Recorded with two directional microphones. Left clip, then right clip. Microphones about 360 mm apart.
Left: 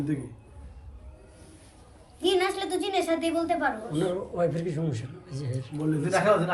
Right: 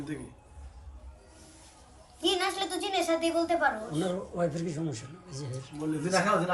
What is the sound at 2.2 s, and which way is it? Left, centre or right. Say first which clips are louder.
A woman's voice: left 3 dB; centre.